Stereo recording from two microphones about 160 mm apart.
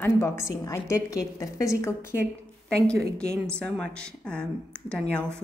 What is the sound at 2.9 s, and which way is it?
A woman's voice, 5° left (ahead or behind).